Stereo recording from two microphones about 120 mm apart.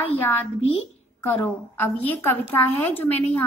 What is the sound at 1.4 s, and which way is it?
Speech, 15° left (ahead or behind).